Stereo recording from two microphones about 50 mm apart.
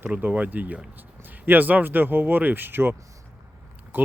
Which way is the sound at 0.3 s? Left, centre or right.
Right.